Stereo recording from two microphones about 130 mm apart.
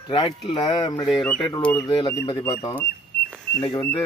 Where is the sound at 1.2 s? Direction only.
10° left (ahead or behind).